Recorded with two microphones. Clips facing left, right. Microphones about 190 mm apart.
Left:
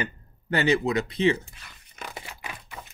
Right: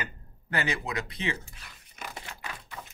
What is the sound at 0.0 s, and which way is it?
Speech, 25° left (ahead or behind).